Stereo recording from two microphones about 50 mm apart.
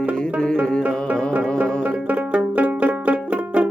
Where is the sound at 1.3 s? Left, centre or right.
Right.